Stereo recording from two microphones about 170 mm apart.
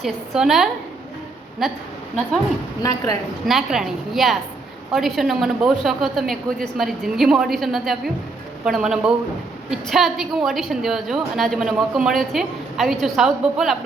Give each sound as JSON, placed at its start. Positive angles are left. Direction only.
{"t": 0.0, "sound": "a woman's voice", "side_deg": 0}
{"t": 2.8, "sound": "a woman's voice", "side_deg": 20}
{"t": 3.4, "sound": "a woman's voice", "side_deg": 0}